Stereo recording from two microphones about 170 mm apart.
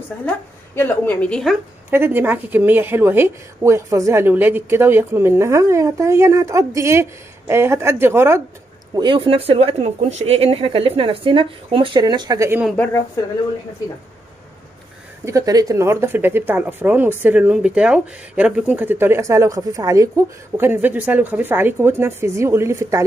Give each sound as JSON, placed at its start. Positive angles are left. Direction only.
{"t": 0.7, "sound": "a woman's voice", "side_deg": 10}
{"t": 1.9, "sound": "speech", "side_deg": -15}
{"t": 8.9, "sound": "speech", "side_deg": -30}
{"t": 12.7, "sound": "a woman's voice", "side_deg": 10}
{"t": 15.2, "sound": "speech", "side_deg": -20}